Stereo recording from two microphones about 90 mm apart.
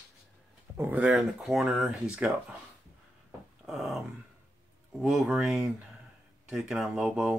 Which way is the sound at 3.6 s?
5° right (ahead or behind).